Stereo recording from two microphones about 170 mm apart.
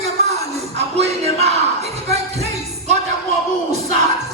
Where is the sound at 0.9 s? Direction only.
40° right (ahead or behind).